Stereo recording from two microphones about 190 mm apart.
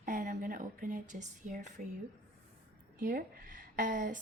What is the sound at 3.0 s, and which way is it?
A woman's voice, 45° right (ahead or behind).